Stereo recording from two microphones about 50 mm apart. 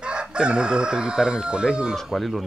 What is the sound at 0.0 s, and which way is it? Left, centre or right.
Chicken, centre.